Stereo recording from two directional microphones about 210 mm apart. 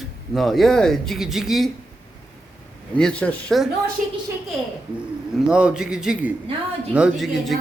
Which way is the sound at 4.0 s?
40° right (ahead or behind).